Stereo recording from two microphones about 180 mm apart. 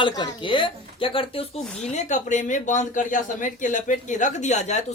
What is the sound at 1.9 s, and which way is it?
Speech, 40° left (ahead or behind).